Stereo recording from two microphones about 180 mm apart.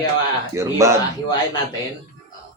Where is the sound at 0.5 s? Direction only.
15° right (ahead or behind).